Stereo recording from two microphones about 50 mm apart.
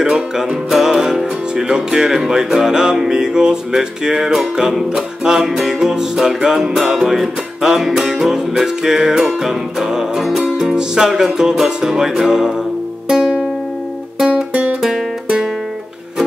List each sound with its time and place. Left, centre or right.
0.0 s music: centre
14.5 s music: right